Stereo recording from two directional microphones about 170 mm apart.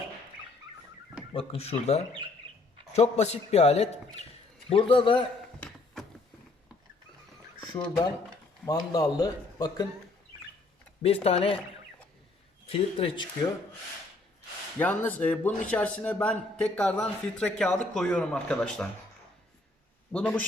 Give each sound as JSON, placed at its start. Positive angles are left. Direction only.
{"t": 1.3, "sound": "a man's voice", "side_deg": 35}
{"t": 5.5, "sound": "a sound", "side_deg": 5}
{"t": 7.6, "sound": "a man's voice", "side_deg": 25}
{"t": 11.0, "sound": "a man's voice", "side_deg": 35}
{"t": 12.6, "sound": "speech", "side_deg": 35}
{"t": 14.8, "sound": "a man's voice", "side_deg": 10}
{"t": 20.1, "sound": "a man's voice", "side_deg": 5}